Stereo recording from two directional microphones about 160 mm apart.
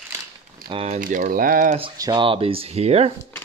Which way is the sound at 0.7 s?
35° right (ahead or behind).